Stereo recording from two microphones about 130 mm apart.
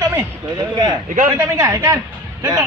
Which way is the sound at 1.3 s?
25° right (ahead or behind).